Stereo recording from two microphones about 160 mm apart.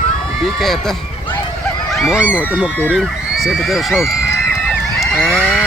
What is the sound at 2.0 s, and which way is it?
Speech, 5° right (ahead or behind).